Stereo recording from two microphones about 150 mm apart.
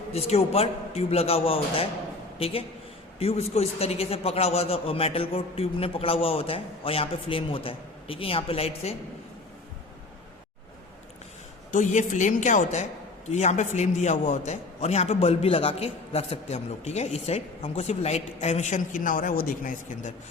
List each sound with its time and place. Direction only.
0.1 s a man's voice: 45° left (ahead or behind)
11.7 s a woman's voice: 55° left (ahead or behind)